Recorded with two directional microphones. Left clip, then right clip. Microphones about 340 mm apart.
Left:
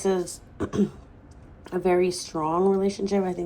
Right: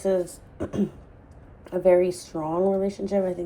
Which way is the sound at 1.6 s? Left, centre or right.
Centre.